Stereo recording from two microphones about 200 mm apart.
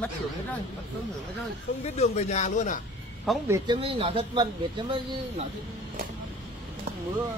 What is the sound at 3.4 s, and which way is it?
Speech, 20° right (ahead or behind).